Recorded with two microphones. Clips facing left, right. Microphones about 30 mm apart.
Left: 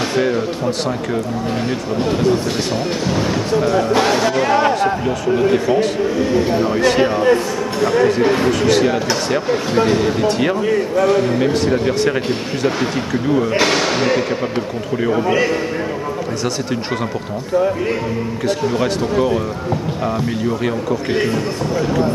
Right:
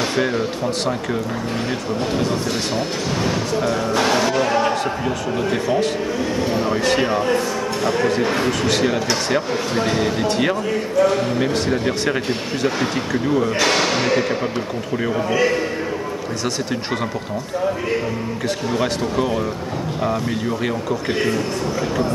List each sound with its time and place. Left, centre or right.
0.1 s speech: centre
2.0 s a man's voice: centre
4.1 s music: centre
4.4 s a sound: centre
5.0 s a man's voice: centre
18.7 s a man's voice: centre